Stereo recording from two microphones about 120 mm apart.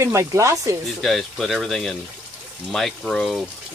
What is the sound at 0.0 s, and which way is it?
Speech, 25° right (ahead or behind).